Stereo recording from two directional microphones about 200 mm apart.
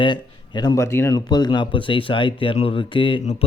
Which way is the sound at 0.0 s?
20° left (ahead or behind).